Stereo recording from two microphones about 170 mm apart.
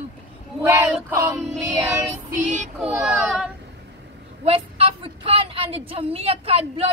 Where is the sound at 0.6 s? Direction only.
15° right (ahead or behind).